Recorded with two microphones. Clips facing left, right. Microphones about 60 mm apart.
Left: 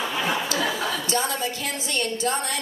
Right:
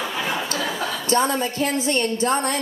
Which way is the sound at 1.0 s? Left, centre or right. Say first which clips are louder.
Right 5 dB; right.